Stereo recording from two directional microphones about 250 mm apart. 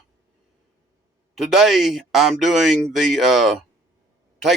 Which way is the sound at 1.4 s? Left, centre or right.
Centre.